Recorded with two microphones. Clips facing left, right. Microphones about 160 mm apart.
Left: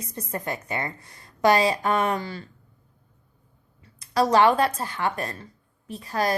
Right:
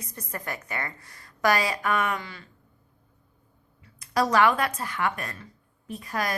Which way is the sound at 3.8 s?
30° left (ahead or behind).